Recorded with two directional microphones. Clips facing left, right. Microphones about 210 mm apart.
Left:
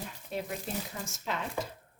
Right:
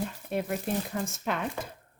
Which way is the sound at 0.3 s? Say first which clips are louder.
Right 5 dB; 55° right (ahead or behind).